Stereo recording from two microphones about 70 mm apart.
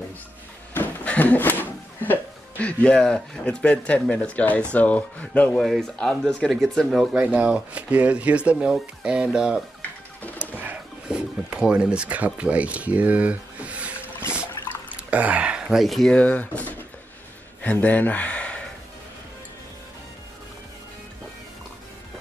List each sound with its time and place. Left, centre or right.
0.7 s speech: left; by 7.2 s centre
7.2 s speech: centre
11.1 s speech: centre
14.3 s a sound: centre
16.1 s speech: centre